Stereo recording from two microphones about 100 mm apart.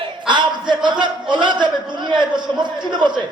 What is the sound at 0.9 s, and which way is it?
A man's voice, 50° right (ahead or behind).